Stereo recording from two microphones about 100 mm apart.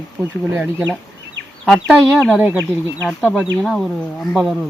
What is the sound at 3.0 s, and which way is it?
Speech, centre (ahead or behind).